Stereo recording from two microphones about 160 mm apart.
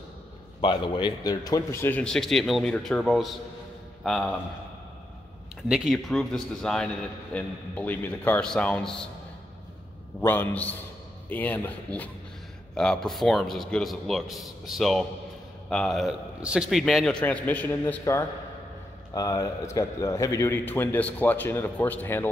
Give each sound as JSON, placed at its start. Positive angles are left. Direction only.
{"t": 0.6, "sound": "a man's voice", "side_deg": 30}
{"t": 5.7, "sound": "a man's voice", "side_deg": 0}
{"t": 10.2, "sound": "a man's voice", "side_deg": 15}